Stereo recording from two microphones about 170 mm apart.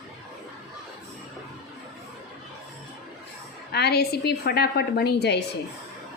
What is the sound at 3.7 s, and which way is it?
A woman's voice, 70° left (ahead or behind).